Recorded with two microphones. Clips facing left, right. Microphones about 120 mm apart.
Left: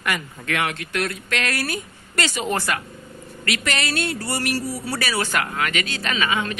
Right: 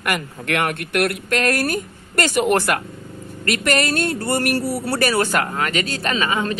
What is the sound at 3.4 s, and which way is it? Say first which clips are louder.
Speech: right 6 dB; 45° right (ahead or behind).